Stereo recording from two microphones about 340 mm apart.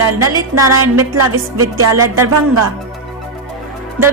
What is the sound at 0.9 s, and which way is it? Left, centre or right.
A woman's voice, right.